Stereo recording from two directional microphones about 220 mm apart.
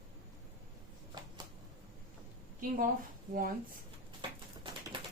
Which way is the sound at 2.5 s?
40° right (ahead or behind).